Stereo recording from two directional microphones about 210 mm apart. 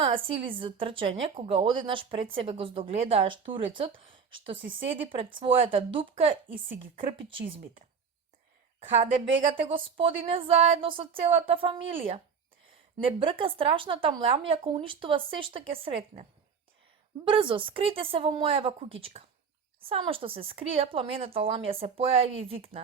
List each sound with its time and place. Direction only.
0.0 s a woman's voice: 25° right (ahead or behind)
9.5 s a woman's voice: 25° right (ahead or behind)
17.2 s a woman's voice: 25° right (ahead or behind)